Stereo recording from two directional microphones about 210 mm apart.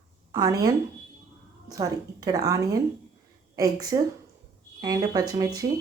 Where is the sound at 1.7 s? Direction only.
15° right (ahead or behind).